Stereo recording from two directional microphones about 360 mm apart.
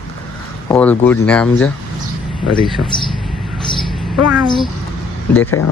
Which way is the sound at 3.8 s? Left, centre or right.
Centre.